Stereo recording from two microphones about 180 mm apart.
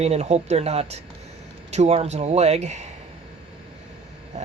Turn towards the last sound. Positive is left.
turn(degrees=-40)  # may be behind; listen again after turning